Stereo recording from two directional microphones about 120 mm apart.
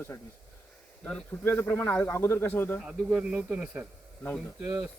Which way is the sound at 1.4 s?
20° left (ahead or behind).